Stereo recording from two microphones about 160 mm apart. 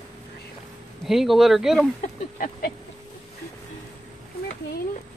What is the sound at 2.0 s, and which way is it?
Speech, 55° left (ahead or behind).